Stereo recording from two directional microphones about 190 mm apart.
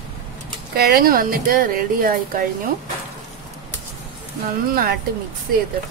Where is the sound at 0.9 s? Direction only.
55° right (ahead or behind).